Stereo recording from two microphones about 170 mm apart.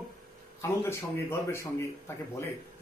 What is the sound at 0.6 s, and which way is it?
Speech, 15° left (ahead or behind).